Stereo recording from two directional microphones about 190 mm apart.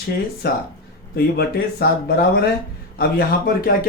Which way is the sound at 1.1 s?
55° left (ahead or behind).